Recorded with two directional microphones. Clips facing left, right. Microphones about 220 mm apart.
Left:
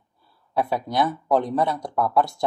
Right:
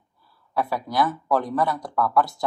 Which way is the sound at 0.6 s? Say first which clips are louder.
Left 1 dB; 25° left (ahead or behind).